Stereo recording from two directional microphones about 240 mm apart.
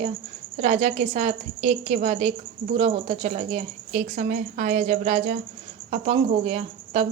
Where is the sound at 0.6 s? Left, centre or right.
Right.